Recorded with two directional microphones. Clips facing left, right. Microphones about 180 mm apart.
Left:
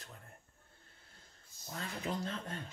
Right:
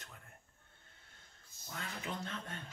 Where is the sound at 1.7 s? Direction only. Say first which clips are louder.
Left 4 dB; 35° left (ahead or behind).